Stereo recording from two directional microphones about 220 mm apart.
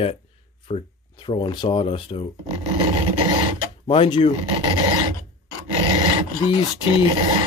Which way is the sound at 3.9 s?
25° left (ahead or behind).